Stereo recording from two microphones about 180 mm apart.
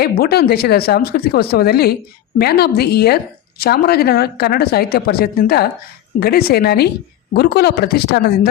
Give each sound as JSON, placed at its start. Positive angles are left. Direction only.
{"t": 0.0, "sound": "speech", "side_deg": 60}